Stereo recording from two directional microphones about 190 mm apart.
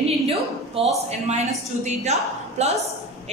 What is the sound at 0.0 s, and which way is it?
A woman's voice, 30° right (ahead or behind).